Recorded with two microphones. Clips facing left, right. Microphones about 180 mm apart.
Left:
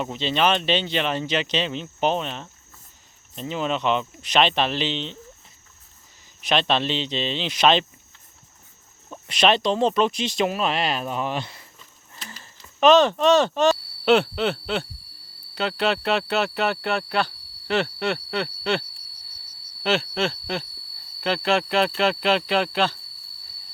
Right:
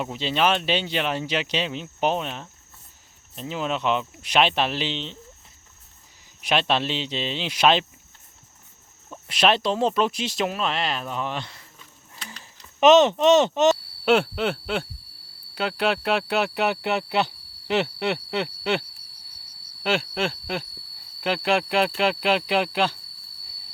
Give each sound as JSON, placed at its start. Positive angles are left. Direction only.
{"t": 0.0, "sound": "speech", "side_deg": -5}
{"t": 6.4, "sound": "speech", "side_deg": -10}
{"t": 9.2, "sound": "speech", "side_deg": -5}
{"t": 12.1, "sound": "a sound", "side_deg": 5}
{"t": 12.4, "sound": "speech", "side_deg": -20}
{"t": 14.0, "sound": "speech", "side_deg": -10}